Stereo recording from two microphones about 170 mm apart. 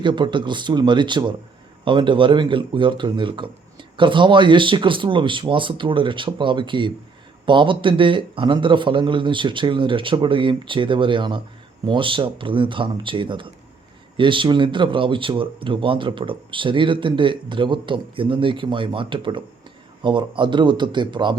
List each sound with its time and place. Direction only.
0.0 s speech: 30° right (ahead or behind)